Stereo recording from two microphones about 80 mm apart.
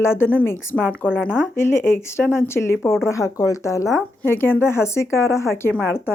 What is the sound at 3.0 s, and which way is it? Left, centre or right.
Speech, left.